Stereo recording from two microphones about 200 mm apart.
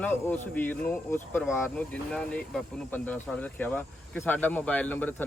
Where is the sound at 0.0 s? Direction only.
10° left (ahead or behind).